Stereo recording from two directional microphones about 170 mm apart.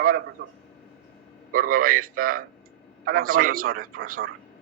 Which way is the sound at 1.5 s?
55° right (ahead or behind).